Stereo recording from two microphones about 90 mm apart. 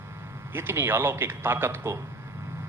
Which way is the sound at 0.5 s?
25° right (ahead or behind).